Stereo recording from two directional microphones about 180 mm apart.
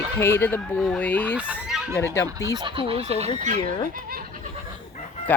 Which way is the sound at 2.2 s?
20° right (ahead or behind).